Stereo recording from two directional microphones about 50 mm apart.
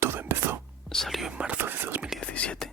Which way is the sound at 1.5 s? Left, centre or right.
Right.